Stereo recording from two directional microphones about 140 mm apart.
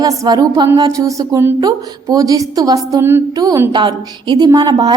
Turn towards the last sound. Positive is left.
turn(degrees=-30)  # may be behind; listen again after turning